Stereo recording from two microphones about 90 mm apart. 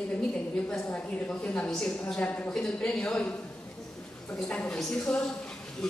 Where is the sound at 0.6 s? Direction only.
15° left (ahead or behind).